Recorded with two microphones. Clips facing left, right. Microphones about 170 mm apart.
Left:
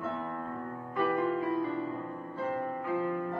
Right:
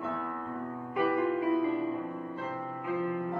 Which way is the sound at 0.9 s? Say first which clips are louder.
Right 1 dB; 20° right (ahead or behind).